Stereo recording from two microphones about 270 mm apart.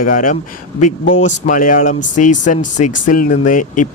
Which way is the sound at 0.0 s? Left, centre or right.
Left.